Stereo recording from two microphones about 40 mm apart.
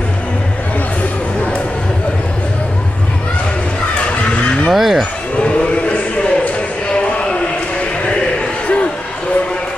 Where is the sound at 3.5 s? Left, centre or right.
Left.